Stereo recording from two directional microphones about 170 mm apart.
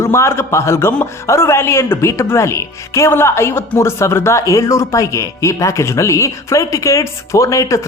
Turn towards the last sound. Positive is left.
turn(degrees=20)  # may be behind; listen again after turning